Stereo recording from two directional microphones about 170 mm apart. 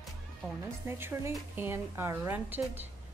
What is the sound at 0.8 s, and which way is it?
Speech, 15° right (ahead or behind).